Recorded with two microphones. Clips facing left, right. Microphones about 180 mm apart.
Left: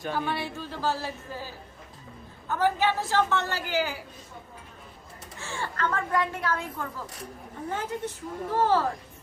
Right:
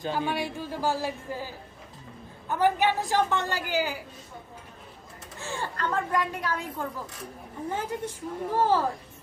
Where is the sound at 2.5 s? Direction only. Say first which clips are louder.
Right 1 dB; 15° right (ahead or behind).